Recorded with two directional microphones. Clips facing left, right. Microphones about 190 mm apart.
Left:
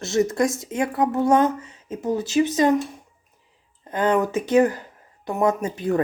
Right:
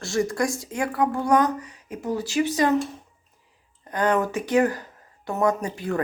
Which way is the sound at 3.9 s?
20° left (ahead or behind).